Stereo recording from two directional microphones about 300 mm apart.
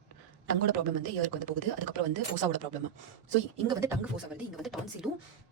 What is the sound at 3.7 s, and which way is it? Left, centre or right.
A woman's voice, centre.